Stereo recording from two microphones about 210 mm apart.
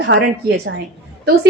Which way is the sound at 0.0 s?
55° right (ahead or behind).